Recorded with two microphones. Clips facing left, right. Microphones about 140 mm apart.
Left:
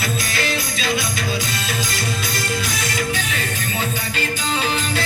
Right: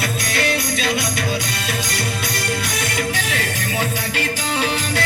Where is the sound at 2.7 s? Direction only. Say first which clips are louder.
Right 1 dB; 70° right (ahead or behind).